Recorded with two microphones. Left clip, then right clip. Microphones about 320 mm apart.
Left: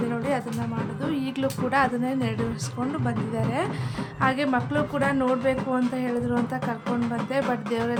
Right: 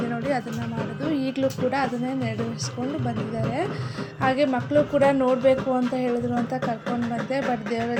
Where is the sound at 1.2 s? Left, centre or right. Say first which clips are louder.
Right 5 dB; centre.